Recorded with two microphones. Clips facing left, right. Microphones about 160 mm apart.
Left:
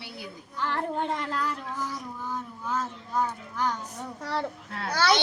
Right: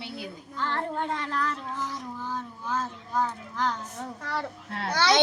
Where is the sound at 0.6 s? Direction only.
15° left (ahead or behind).